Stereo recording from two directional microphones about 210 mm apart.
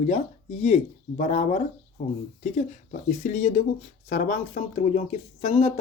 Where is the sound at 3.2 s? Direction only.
35° left (ahead or behind).